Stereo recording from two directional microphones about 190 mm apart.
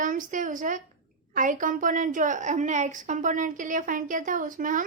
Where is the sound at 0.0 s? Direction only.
45° right (ahead or behind).